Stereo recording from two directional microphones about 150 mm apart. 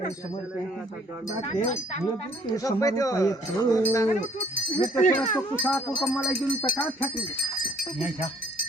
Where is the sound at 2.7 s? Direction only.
25° left (ahead or behind).